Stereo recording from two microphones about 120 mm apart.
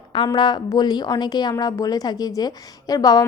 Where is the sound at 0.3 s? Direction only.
40° left (ahead or behind).